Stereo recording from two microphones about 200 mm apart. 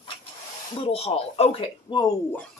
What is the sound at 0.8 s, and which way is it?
Speech, 30° left (ahead or behind).